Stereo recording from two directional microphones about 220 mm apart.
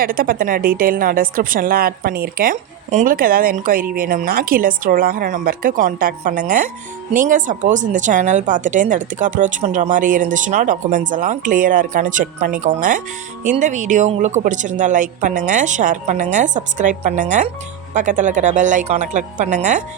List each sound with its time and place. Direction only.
0.0 s speech: 40° right (ahead or behind)